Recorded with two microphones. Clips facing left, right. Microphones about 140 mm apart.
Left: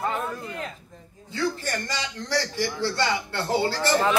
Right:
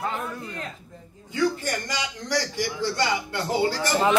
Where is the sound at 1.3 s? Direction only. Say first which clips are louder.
Right 3 dB; 15° right (ahead or behind).